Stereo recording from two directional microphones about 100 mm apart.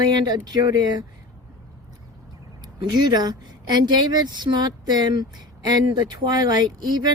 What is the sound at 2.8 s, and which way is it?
A woman's voice, 45° right (ahead or behind).